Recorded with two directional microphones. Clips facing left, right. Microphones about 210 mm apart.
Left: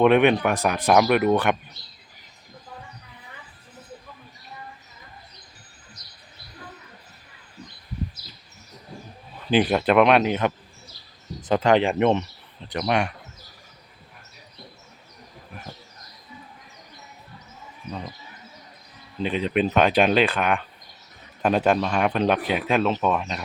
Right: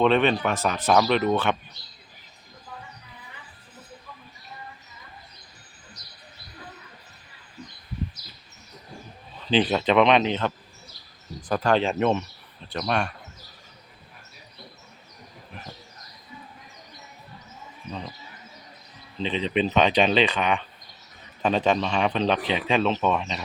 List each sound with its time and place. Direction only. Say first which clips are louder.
0.0 s speech: left 4 dB; 15° left (ahead or behind)
9.3 s speech: left 2 dB; 10° left (ahead or behind)
11.4 s speech: left 3 dB; 20° left (ahead or behind)
19.1 s speech: left 2 dB; 10° left (ahead or behind)